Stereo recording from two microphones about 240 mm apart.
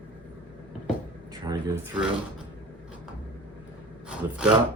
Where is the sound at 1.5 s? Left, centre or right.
Centre.